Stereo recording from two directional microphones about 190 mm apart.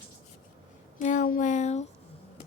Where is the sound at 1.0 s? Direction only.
40° left (ahead or behind).